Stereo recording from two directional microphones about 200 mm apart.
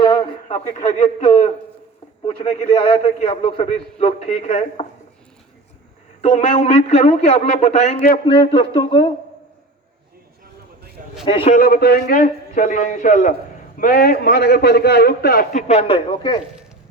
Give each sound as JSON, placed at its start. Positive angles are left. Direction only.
{"t": 0.0, "sound": "a sound", "side_deg": 20}
{"t": 0.4, "sound": "speech", "side_deg": 35}
{"t": 2.2, "sound": "speech", "side_deg": 30}
{"t": 6.2, "sound": "speech", "side_deg": 30}
{"t": 8.3, "sound": "a man's voice", "side_deg": 25}
{"t": 11.3, "sound": "a man's voice", "side_deg": 25}
{"t": 11.5, "sound": "a man's voice", "side_deg": 50}